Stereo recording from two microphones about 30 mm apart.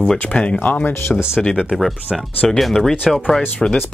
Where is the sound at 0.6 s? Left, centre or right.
Left.